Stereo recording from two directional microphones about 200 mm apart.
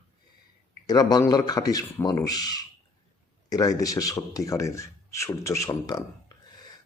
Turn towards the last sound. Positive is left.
turn(degrees=20)  # may be behind; listen again after turning